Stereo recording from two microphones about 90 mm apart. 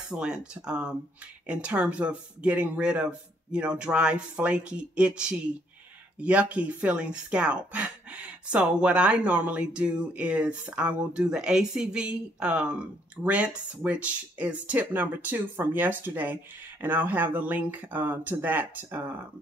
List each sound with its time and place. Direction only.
0.1 s speech: 10° right (ahead or behind)